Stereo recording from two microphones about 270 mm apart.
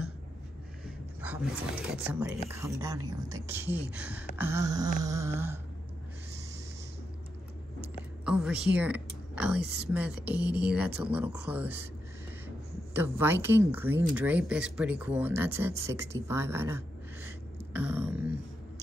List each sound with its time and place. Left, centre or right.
0.8 s a sound: centre
1.9 s a woman's voice: centre
8.3 s speech: centre
9.6 s a woman's voice: right
9.9 s speech: centre
12.9 s a woman's voice: centre